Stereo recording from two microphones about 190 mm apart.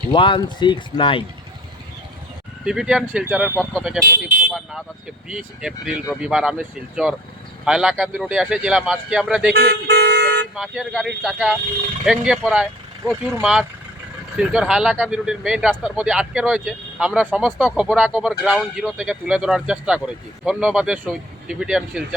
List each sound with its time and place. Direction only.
0.1 s speech: 25° left (ahead or behind)
2.6 s speech: 5° right (ahead or behind)
5.3 s speech: 5° right (ahead or behind)
9.5 s vehicle: 60° right (ahead or behind)
10.5 s speech: 5° right (ahead or behind)